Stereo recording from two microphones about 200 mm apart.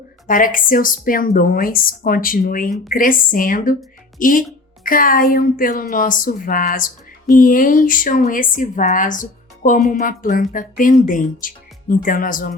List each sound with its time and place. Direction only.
0.3 s speech: 45° left (ahead or behind)